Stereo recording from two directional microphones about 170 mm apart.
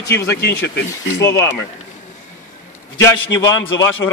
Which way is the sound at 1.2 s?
15° left (ahead or behind).